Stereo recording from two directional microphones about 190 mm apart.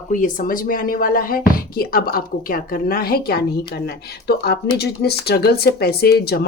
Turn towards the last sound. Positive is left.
turn(degrees=60)  # may be behind; listen again after turning